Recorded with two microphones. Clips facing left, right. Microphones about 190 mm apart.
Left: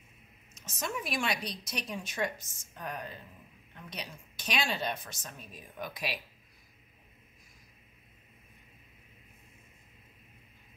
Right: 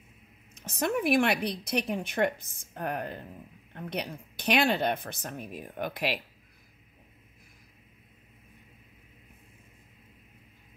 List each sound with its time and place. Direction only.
0.6 s a woman's voice: 60° right (ahead or behind)